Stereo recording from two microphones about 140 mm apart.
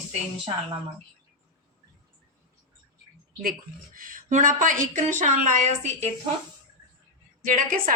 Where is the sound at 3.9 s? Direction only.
75° right (ahead or behind); by 6.1 s 55° right (ahead or behind).